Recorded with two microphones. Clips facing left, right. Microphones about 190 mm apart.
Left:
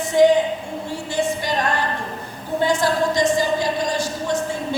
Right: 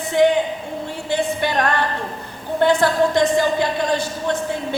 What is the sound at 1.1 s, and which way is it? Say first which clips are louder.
Speech: right 3 dB; 60° right (ahead or behind).